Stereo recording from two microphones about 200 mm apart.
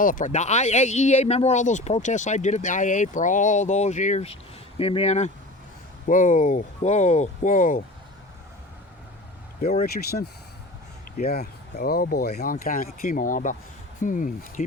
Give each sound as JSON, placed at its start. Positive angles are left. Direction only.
{"t": 0.0, "sound": "speech", "side_deg": 40}
{"t": 9.6, "sound": "speech", "side_deg": 45}